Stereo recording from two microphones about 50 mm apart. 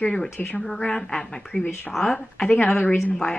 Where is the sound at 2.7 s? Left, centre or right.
Left.